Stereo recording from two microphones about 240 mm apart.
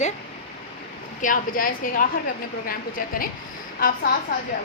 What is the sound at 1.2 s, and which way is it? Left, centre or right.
A woman's voice, left.